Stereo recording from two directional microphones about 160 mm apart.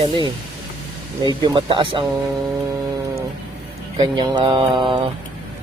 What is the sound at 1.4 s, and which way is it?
Speech, 30° right (ahead or behind).